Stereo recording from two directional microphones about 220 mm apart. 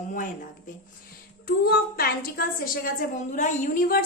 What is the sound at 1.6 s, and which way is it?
A woman's voice, 45° left (ahead or behind).